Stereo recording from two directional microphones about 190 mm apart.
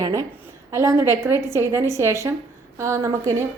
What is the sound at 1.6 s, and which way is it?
A woman's voice, 15° right (ahead or behind).